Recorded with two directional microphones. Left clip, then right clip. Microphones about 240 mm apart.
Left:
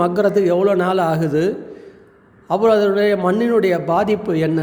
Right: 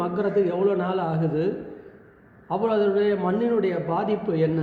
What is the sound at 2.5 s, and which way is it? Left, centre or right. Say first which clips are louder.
A man's voice: left 8 dB; left.